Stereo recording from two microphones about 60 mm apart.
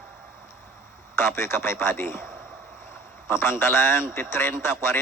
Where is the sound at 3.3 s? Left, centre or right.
Left.